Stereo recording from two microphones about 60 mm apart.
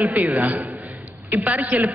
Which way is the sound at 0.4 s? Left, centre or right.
Right.